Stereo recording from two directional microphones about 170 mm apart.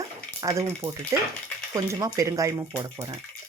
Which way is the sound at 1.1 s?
20° right (ahead or behind).